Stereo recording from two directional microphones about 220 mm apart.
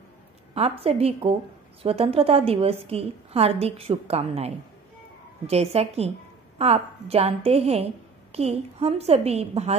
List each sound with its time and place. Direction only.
0.6 s a woman's voice: 25° right (ahead or behind)
5.5 s a woman's voice: 30° right (ahead or behind)